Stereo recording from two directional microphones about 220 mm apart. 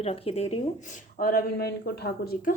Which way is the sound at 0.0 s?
25° left (ahead or behind).